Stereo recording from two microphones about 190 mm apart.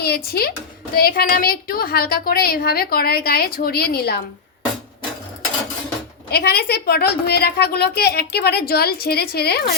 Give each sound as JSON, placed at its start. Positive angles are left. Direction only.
{"t": 0.0, "sound": "a woman's voice", "side_deg": 55}
{"t": 6.3, "sound": "a woman's voice", "side_deg": 55}